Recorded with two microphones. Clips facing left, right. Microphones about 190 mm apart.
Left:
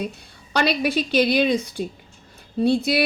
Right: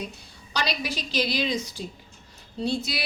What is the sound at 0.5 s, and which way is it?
A woman's voice, 60° left (ahead or behind).